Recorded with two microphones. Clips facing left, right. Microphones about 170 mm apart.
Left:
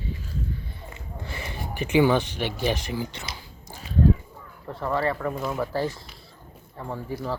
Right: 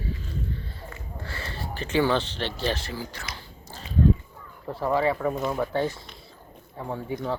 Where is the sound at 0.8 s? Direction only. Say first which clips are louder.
Even; 20° left (ahead or behind).